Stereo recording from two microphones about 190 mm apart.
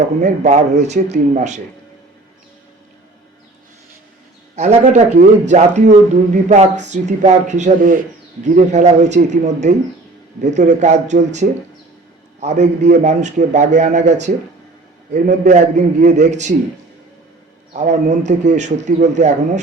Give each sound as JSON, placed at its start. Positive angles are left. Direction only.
{"t": 0.2, "sound": "speech", "side_deg": -35}
{"t": 4.5, "sound": "speech", "side_deg": -40}
{"t": 17.7, "sound": "speech", "side_deg": -35}